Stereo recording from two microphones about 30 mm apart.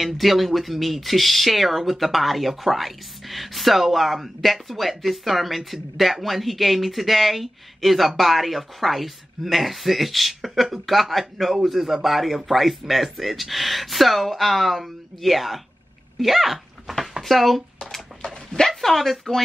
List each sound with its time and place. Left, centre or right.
0.0 s speech: centre
18.3 s speech: centre
18.8 s speech: centre